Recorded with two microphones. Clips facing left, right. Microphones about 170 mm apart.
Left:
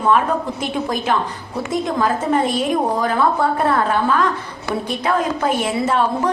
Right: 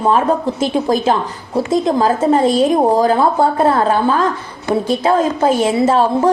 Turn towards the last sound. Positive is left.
turn(degrees=-30)  # may be behind; listen again after turning